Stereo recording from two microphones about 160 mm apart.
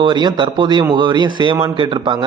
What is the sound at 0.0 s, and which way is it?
A man's voice, 30° right (ahead or behind).